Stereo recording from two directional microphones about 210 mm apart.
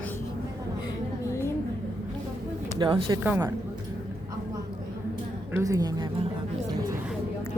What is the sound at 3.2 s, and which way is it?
Speech, 10° right (ahead or behind).